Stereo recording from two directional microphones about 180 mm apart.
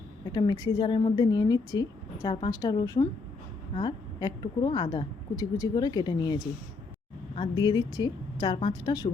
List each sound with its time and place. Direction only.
0.3 s a woman's voice: 20° left (ahead or behind)